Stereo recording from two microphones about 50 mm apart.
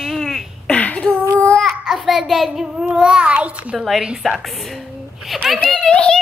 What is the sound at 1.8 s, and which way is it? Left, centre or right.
Speech, centre.